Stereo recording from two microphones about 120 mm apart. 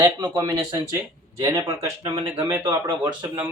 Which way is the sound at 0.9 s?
25° right (ahead or behind).